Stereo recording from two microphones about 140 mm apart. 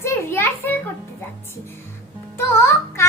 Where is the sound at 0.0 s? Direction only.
20° left (ahead or behind).